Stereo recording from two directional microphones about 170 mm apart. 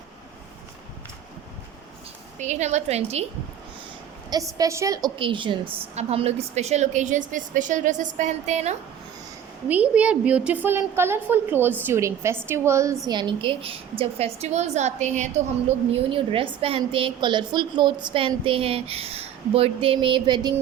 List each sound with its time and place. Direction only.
2.4 s a woman's voice: 45° right (ahead or behind)
4.3 s a woman's voice: 20° right (ahead or behind); by 8.7 s 40° right (ahead or behind)
9.6 s a woman's voice: 10° right (ahead or behind); by 15.3 s 45° right (ahead or behind)
15.9 s a woman's voice: 35° right (ahead or behind)